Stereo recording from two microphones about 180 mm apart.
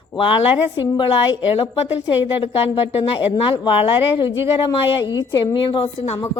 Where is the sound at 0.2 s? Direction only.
30° left (ahead or behind).